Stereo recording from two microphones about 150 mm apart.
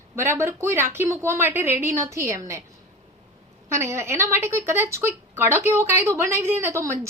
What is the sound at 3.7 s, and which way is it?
Speech, 20° right (ahead or behind).